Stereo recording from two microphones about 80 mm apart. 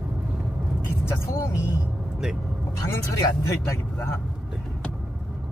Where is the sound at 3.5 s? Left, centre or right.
Left.